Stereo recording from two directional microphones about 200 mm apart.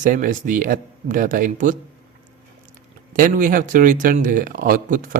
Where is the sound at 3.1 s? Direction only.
45° right (ahead or behind).